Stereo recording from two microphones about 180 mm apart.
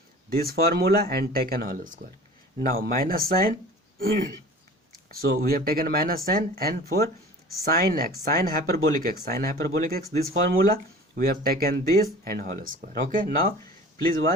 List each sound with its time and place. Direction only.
0.3 s speech: 55° right (ahead or behind)
5.1 s speech: 55° right (ahead or behind)